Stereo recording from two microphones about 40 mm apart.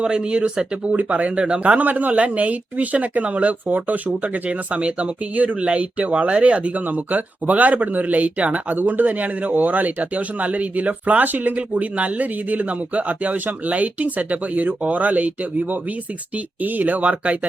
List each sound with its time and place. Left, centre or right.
0.0 s speech: right
0.9 s speech: right
1.4 s speech: right
1.8 s speech: right
5.3 s speech: right
5.5 s speech: right
8.7 s speech: right
11.5 s speech: right
16.6 s speech: right